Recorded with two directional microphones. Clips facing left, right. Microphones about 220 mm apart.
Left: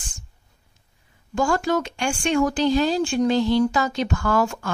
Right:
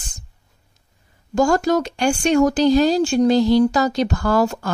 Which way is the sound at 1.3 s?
40° right (ahead or behind).